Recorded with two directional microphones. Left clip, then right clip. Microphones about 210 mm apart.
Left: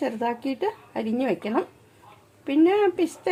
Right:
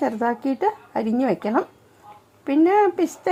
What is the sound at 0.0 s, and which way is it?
Speech, 20° right (ahead or behind).